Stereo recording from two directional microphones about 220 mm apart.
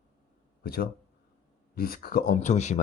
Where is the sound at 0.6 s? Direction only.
45° left (ahead or behind).